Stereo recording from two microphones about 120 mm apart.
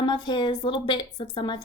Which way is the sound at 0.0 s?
40° left (ahead or behind).